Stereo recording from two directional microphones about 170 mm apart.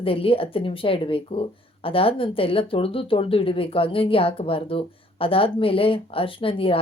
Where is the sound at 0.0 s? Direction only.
35° left (ahead or behind).